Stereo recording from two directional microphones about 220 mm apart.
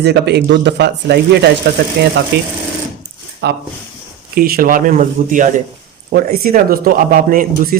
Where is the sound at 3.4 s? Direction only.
45° right (ahead or behind).